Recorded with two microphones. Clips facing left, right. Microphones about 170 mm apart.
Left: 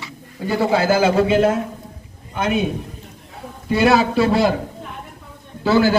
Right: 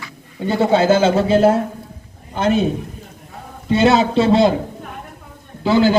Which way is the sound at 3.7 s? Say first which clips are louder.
Right 2 dB; 25° right (ahead or behind).